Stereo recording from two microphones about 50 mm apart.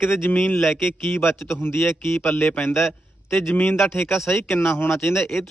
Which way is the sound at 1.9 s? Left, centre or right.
Left.